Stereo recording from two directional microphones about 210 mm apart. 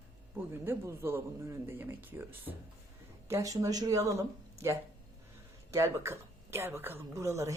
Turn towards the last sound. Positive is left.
turn(degrees=-15)  # may be behind; listen again after turning